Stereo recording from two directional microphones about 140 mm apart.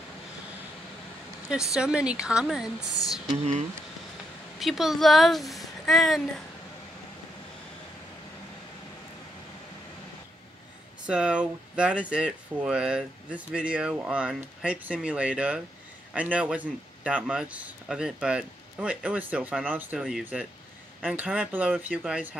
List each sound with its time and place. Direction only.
1.8 s speech: 5° right (ahead or behind)
2.9 s a sound: 25° left (ahead or behind)
4.6 s speech: centre (ahead or behind)
11.1 s speech: 5° right (ahead or behind)